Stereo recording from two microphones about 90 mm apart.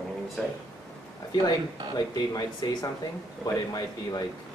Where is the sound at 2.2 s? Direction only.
45° left (ahead or behind).